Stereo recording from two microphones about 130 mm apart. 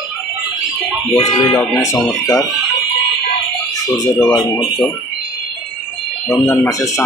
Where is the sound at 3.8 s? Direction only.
25° left (ahead or behind).